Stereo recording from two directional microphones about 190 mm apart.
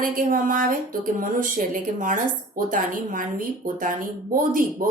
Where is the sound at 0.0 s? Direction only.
45° right (ahead or behind).